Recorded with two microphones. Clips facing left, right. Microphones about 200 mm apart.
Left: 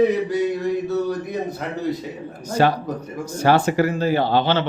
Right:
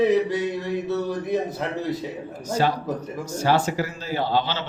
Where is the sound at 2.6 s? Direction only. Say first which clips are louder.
Left 5 dB; 65° left (ahead or behind).